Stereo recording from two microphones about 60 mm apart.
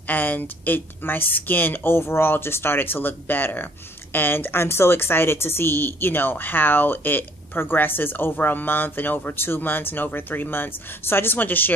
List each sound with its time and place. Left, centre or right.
0.1 s a woman's voice: left